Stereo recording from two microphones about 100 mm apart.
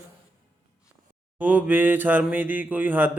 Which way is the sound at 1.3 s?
15° right (ahead or behind).